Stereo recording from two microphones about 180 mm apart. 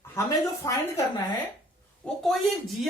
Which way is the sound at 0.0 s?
15° left (ahead or behind).